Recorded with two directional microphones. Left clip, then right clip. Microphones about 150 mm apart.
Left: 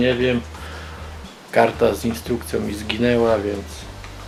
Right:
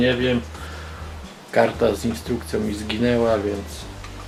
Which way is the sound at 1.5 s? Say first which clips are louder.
Left 2 dB; 15° left (ahead or behind).